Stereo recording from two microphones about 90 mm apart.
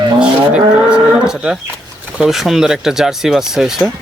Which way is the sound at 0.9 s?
5° right (ahead or behind).